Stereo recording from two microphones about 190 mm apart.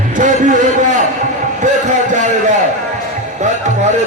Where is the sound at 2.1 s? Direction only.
40° right (ahead or behind).